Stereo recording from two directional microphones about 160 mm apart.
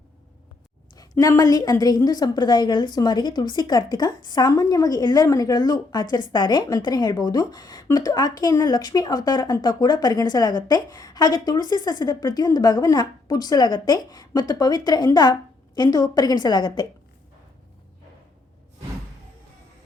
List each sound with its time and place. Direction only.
0.9 s a woman's voice: 20° left (ahead or behind)